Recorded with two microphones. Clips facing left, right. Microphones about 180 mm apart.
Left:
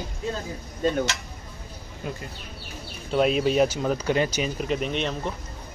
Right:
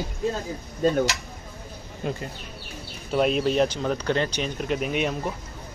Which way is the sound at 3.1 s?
Centre (ahead or behind).